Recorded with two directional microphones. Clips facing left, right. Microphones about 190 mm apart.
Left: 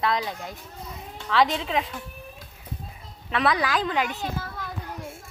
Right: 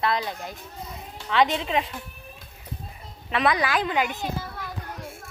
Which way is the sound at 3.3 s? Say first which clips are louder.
Right 1 dB; 10° right (ahead or behind).